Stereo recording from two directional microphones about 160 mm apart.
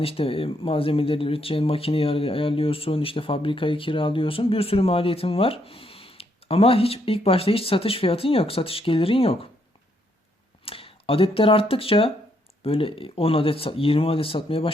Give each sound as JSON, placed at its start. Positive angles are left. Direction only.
{"t": 0.0, "sound": "speech", "side_deg": 35}
{"t": 10.7, "sound": "speech", "side_deg": 35}